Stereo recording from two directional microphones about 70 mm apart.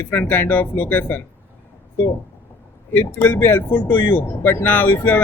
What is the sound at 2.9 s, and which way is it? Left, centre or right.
Speech, left.